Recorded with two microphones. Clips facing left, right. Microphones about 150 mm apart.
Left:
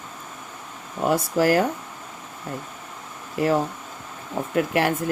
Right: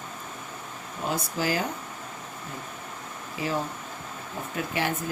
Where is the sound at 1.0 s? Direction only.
70° left (ahead or behind).